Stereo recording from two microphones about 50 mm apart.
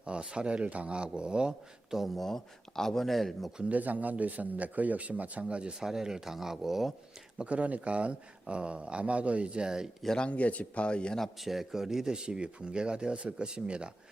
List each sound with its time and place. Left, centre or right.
0.0 s speech: centre
2.0 s speech: centre
3.6 s a man's voice: right
5.8 s speech: centre
7.3 s speech: right
10.2 s speech: left
11.2 s speech: centre